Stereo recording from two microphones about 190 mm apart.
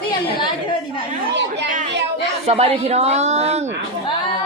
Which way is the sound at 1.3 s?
70° right (ahead or behind).